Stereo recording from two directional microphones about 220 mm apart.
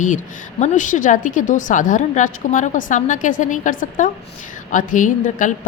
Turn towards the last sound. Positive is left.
turn(degrees=35)  # may be behind; listen again after turning